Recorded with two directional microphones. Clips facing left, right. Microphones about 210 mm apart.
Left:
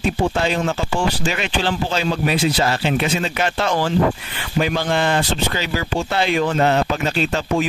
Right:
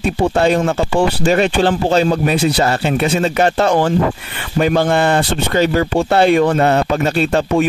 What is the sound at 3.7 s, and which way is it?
Speech, 55° right (ahead or behind).